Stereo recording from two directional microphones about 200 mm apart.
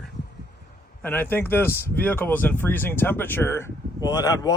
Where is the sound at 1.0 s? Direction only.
10° left (ahead or behind).